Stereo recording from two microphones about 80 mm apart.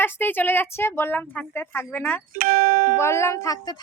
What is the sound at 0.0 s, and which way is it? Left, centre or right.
Speech, left.